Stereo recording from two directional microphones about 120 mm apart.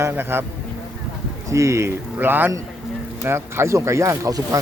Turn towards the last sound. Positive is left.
turn(degrees=-25)  # may be behind; listen again after turning